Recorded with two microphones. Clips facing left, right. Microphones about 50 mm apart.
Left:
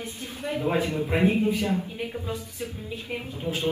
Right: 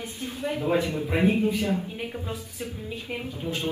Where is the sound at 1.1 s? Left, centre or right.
Centre.